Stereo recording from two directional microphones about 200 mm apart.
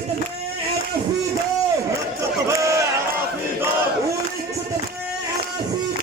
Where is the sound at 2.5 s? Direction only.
15° right (ahead or behind).